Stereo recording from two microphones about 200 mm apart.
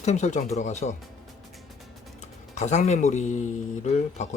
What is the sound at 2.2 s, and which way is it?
Speech, 35° left (ahead or behind).